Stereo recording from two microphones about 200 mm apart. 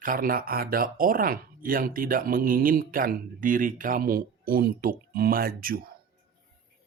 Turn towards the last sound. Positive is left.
turn(degrees=-45)  # may be behind; listen again after turning